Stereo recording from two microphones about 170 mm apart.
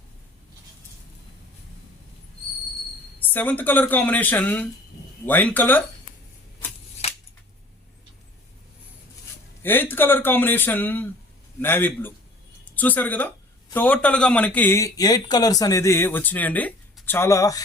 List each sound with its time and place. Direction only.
3.2 s a man's voice: 10° left (ahead or behind)
7.0 s scissors: 40° left (ahead or behind)
9.6 s a man's voice: 10° left (ahead or behind)